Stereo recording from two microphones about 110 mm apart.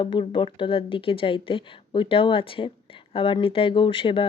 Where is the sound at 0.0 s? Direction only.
50° left (ahead or behind).